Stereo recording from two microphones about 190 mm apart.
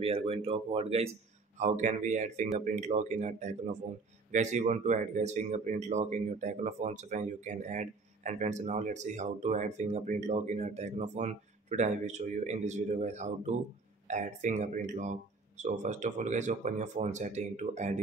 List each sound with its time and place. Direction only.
0.0 s speech: 30° right (ahead or behind)